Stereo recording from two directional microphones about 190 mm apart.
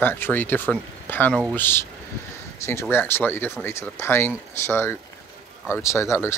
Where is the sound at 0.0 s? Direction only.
10° left (ahead or behind).